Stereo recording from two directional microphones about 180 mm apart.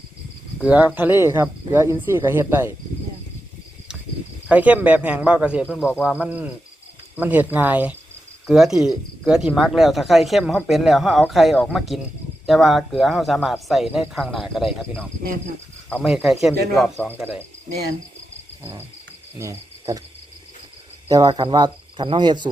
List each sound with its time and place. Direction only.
0.6 s speech: 5° right (ahead or behind)
4.4 s speech: 10° right (ahead or behind)
21.1 s speech: 20° right (ahead or behind)